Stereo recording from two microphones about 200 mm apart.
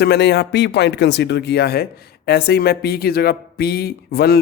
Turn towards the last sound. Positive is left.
turn(degrees=55)  # may be behind; listen again after turning